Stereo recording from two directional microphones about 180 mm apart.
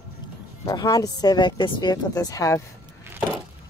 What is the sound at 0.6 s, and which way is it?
A woman's voice, 20° left (ahead or behind).